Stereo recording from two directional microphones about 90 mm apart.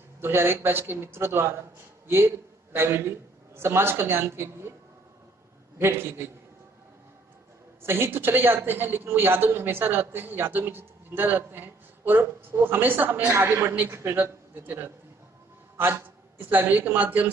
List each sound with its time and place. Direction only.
0.2 s a man's voice: 25° right (ahead or behind)
5.8 s a man's voice: 25° right (ahead or behind)
7.8 s a man's voice: 25° right (ahead or behind)